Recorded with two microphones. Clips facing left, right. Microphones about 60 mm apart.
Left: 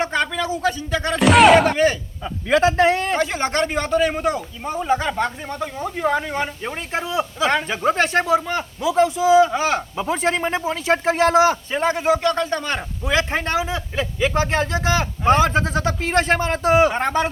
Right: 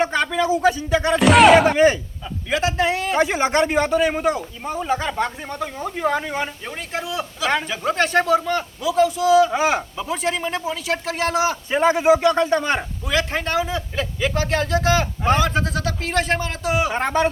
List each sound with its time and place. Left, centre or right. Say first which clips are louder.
0.0 s speech: right 2 dB; centre
1.2 s speech: even; centre
2.5 s a man's voice: left 5 dB; left
3.2 s speech: right 3 dB; centre
6.7 s speech: left 2 dB; left
7.9 s speech: right 3 dB; centre
8.9 s speech: left 1 dB; left
9.5 s a man's voice: right 1 dB; centre
10.0 s speech: left 3 dB; left
11.7 s a man's voice: right 3 dB; centre
13.1 s speech: left 2 dB; left
16.9 s speech: even; centre